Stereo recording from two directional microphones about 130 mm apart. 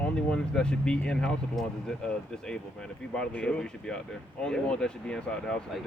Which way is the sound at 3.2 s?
5° left (ahead or behind).